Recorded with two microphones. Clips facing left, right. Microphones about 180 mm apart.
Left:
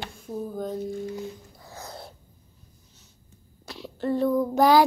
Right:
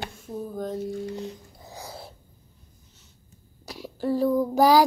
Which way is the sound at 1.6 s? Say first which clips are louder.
Right 1 dB; 15° right (ahead or behind).